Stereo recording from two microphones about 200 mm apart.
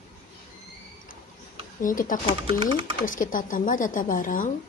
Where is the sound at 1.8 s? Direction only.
40° left (ahead or behind).